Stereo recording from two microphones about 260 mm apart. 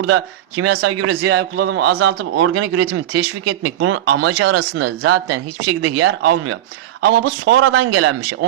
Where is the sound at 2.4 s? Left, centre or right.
Right.